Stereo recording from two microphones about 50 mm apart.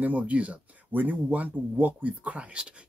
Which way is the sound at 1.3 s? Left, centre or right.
Right.